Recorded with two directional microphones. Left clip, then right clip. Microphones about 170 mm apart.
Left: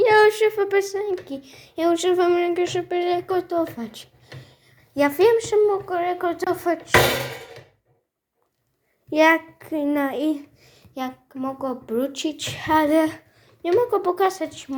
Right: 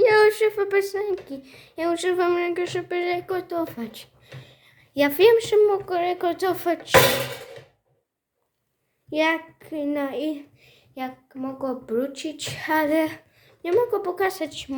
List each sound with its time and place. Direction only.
0.0 s a sound: 5° left (ahead or behind)
1.4 s speech: 10° left (ahead or behind); by 5.9 s 10° right (ahead or behind)
5.9 s a child's voice: 25° right (ahead or behind)
9.0 s a child's voice: 10° left (ahead or behind)
11.6 s speech: 5° right (ahead or behind)
11.9 s a woman's voice: 15° left (ahead or behind)
12.4 s speech: centre (ahead or behind)
13.7 s a woman's voice: 15° left (ahead or behind)
14.4 s a woman's voice: 10° right (ahead or behind)